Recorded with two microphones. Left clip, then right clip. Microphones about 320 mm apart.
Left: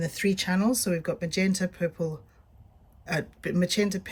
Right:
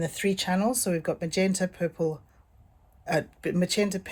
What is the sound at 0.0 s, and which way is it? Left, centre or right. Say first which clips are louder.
Speech: even; centre.